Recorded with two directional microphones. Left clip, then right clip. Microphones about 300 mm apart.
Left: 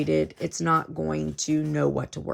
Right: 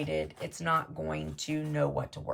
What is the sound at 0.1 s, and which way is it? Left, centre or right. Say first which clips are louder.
Speech: left 8 dB; left.